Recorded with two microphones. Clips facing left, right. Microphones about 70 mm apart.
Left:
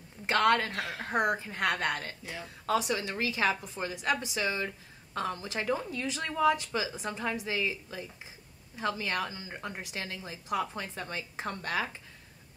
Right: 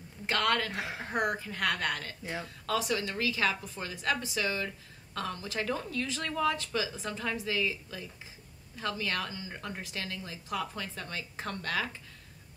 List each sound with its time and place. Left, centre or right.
0.3 s a woman's voice: left
0.7 s speech: centre
1.1 s a woman's voice: left